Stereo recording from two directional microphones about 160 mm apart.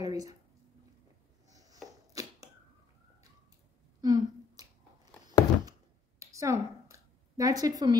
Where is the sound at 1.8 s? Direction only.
20° right (ahead or behind).